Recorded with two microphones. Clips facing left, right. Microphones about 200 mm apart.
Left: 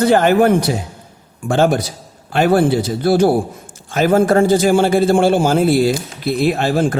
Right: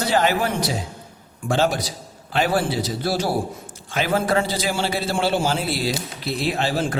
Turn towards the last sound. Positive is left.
turn(degrees=50)  # may be behind; listen again after turning